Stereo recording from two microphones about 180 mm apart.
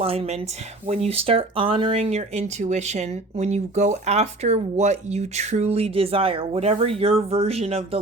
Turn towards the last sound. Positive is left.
turn(degrees=-35)  # may be behind; listen again after turning